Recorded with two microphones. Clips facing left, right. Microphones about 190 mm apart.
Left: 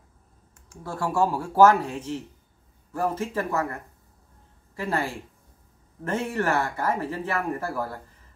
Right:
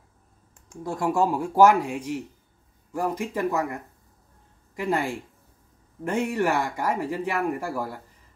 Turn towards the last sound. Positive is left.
turn(degrees=-15)  # may be behind; listen again after turning